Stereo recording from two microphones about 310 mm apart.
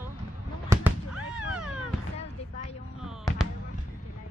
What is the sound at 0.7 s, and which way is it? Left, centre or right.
Cat, centre.